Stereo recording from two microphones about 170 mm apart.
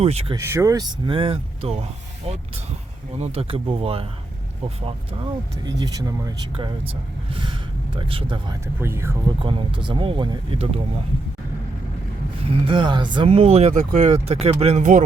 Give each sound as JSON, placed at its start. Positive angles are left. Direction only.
{"t": 0.0, "sound": "speech", "side_deg": -35}
{"t": 0.3, "sound": "speech", "side_deg": -15}
{"t": 3.2, "sound": "speech", "side_deg": -35}
{"t": 7.9, "sound": "speech", "side_deg": -30}
{"t": 8.6, "sound": "speech", "side_deg": -15}
{"t": 9.4, "sound": "speech", "side_deg": -30}
{"t": 12.4, "sound": "speech", "side_deg": -30}